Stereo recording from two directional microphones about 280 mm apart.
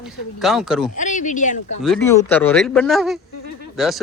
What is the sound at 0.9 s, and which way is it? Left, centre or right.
Speech, left.